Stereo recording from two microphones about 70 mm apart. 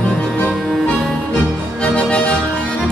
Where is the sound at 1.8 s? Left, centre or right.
Centre.